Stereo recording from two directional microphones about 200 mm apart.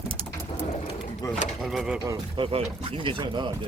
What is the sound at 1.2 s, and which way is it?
Speech, 15° left (ahead or behind).